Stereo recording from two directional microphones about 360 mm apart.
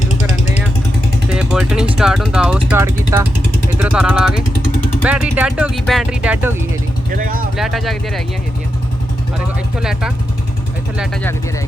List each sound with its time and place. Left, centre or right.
0.0 s vehicle: centre
1.3 s speech: centre
7.1 s speech: right
7.5 s speech: centre
9.8 s speech: centre